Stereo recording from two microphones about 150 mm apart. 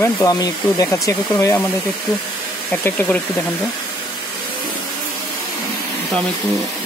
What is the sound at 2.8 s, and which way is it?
Speech, 15° left (ahead or behind).